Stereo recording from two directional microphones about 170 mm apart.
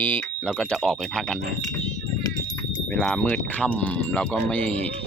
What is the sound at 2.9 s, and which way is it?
Speech, 5° left (ahead or behind).